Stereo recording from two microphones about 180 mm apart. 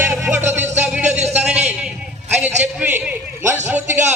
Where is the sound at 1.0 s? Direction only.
40° right (ahead or behind).